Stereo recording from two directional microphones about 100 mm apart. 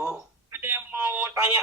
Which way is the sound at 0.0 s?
20° right (ahead or behind).